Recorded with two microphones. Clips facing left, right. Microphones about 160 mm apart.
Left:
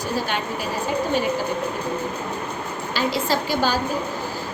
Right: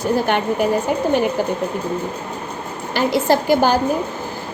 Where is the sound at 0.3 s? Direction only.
60° right (ahead or behind).